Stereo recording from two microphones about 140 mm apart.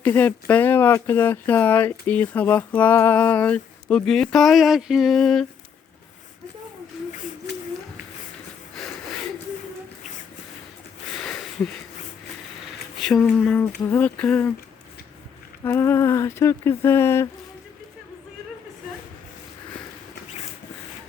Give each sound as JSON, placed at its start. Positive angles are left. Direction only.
{"t": 0.0, "sound": "speech", "side_deg": 10}
{"t": 11.2, "sound": "a sound", "side_deg": 5}
{"t": 13.0, "sound": "speech", "side_deg": 5}
{"t": 15.6, "sound": "speech", "side_deg": 15}